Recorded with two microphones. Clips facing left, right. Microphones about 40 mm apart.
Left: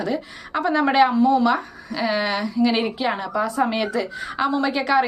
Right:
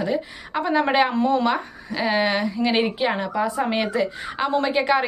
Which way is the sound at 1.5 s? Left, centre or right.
Centre.